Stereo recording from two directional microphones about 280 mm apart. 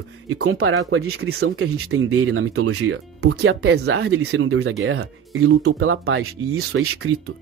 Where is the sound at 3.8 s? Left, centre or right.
Right.